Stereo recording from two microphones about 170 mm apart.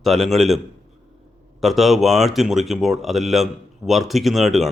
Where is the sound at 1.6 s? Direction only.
Centre (ahead or behind).